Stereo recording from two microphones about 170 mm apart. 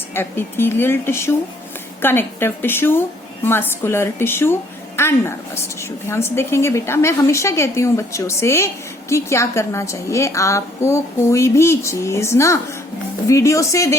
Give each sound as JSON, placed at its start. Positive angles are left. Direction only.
{"t": 0.1, "sound": "a woman's voice", "side_deg": 15}